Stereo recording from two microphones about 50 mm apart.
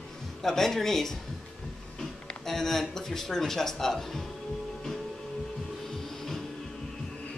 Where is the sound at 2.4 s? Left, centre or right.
Centre.